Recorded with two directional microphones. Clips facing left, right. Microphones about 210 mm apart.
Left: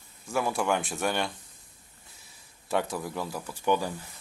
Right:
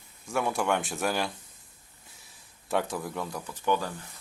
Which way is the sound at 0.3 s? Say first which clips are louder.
Even; centre (ahead or behind).